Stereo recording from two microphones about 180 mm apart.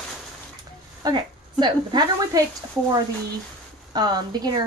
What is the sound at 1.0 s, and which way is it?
A woman's voice, 25° right (ahead or behind).